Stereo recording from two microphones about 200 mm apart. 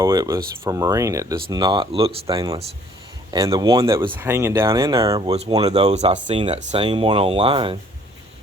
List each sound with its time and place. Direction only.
0.0 s speech: 15° right (ahead or behind)
5.9 s speech: 35° right (ahead or behind)